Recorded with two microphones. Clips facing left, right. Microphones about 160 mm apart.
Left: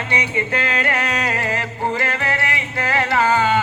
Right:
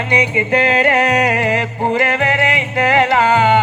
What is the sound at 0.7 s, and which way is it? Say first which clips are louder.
Music: right 8 dB; 30° right (ahead or behind).